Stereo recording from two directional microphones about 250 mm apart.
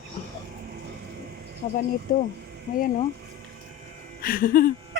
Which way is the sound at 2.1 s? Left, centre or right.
Left.